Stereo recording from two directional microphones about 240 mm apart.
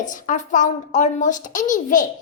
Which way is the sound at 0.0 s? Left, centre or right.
Left.